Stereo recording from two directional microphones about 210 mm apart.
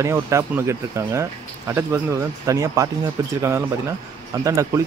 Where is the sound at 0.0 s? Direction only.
15° right (ahead or behind).